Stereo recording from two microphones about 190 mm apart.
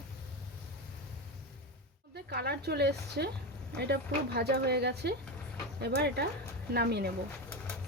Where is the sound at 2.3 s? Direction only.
60° right (ahead or behind).